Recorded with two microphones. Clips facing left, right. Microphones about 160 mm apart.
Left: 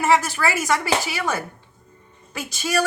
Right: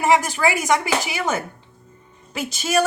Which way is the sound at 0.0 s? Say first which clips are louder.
Right 1 dB; 15° right (ahead or behind).